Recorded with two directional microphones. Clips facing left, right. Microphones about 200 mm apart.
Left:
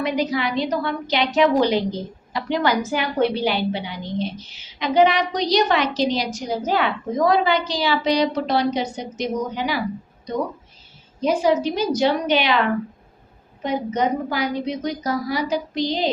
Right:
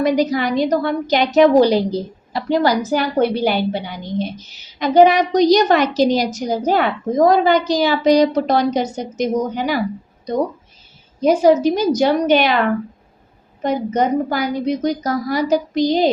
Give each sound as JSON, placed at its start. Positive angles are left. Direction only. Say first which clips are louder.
{"t": 0.0, "sound": "a woman's voice", "louder": "right 6 dB", "side_deg": -40}
{"t": 11.2, "sound": "a woman's voice", "louder": "right 6 dB", "side_deg": -45}
{"t": 13.6, "sound": "a woman's voice", "louder": "right 4 dB", "side_deg": -45}